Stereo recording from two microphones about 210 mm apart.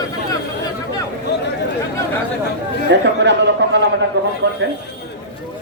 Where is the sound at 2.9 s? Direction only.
55° right (ahead or behind).